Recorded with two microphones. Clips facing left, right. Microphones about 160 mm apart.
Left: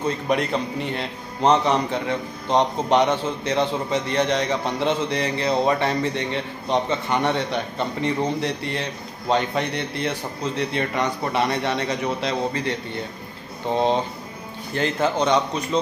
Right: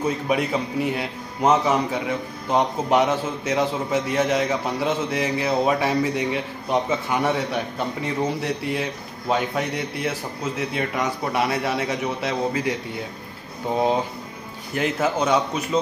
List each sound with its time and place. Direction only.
0.0 s a man's voice: 5° right (ahead or behind)
14.7 s a man's voice: 5° right (ahead or behind)